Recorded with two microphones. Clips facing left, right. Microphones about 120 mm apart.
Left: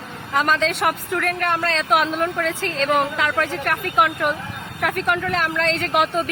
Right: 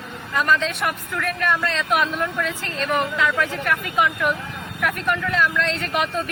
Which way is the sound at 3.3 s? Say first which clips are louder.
Even; 65° left (ahead or behind).